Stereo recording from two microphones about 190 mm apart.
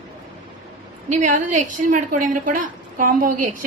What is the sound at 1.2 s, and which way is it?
A woman's voice, 45° right (ahead or behind).